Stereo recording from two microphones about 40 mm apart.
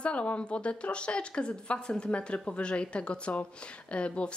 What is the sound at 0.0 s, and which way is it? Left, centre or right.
A woman's voice, left.